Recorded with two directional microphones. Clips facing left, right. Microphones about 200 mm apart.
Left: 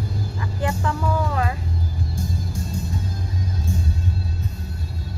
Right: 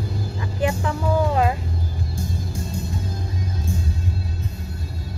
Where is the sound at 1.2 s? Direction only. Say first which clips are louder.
Right 5 dB; 25° right (ahead or behind).